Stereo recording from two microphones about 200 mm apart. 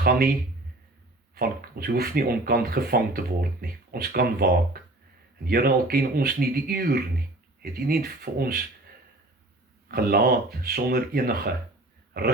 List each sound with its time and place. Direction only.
0.0 s a man's voice: 50° right (ahead or behind)
1.4 s speech: 50° right (ahead or behind)
9.9 s speech: 50° right (ahead or behind)